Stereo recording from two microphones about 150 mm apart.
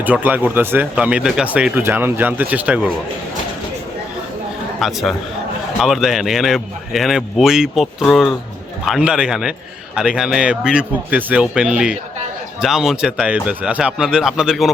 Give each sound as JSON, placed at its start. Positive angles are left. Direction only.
{"t": 0.0, "sound": "speech", "side_deg": -10}
{"t": 4.8, "sound": "a man's voice", "side_deg": 0}